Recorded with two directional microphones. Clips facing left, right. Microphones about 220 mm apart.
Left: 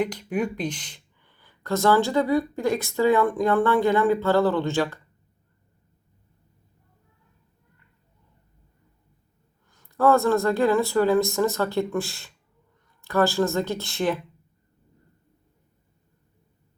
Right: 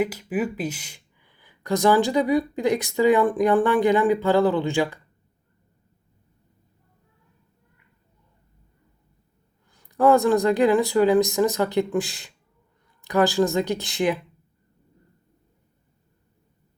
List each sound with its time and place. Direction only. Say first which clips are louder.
0.0 s speech: right 1 dB; 5° right (ahead or behind)
9.7 s speech: right 2 dB; 15° right (ahead or behind)